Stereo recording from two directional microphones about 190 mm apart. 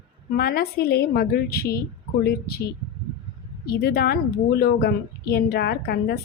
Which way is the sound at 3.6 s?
55° left (ahead or behind).